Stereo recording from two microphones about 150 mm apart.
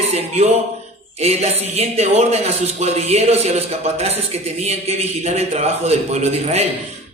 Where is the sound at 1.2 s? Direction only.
45° right (ahead or behind).